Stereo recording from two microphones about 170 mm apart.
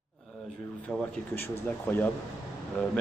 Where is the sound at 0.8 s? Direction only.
10° left (ahead or behind).